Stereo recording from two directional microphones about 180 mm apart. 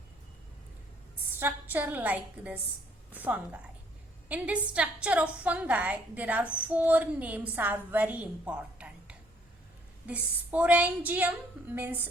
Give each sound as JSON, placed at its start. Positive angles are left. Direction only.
{"t": 1.4, "sound": "a woman's voice", "side_deg": -10}